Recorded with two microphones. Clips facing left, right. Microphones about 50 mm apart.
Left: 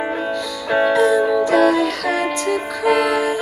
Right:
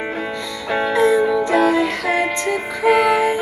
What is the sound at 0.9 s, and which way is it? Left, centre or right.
Music, right.